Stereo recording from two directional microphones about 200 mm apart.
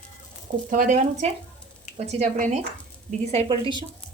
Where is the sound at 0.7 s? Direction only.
40° right (ahead or behind).